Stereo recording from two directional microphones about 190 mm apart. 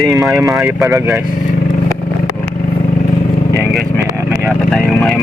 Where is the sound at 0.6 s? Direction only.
15° right (ahead or behind).